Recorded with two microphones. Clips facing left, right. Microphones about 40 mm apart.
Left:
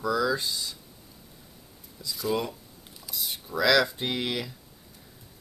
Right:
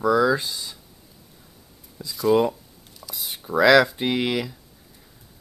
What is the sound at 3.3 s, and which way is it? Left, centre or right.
Speech, right.